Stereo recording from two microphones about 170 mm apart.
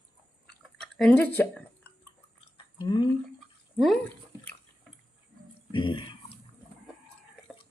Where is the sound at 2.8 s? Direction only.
25° left (ahead or behind).